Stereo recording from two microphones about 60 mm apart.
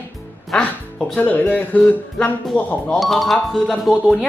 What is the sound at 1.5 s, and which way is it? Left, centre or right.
Music, left.